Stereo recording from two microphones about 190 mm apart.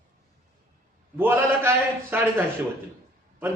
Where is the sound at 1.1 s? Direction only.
10° right (ahead or behind).